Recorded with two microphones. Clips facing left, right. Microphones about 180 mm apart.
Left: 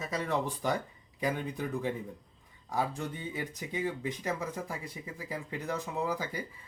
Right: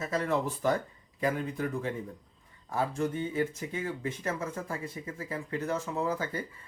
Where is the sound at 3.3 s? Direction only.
15° left (ahead or behind).